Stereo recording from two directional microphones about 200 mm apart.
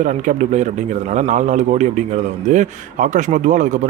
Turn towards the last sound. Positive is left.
turn(degrees=-35)  # may be behind; listen again after turning